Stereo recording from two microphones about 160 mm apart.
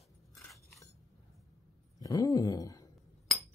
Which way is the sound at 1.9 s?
20° left (ahead or behind).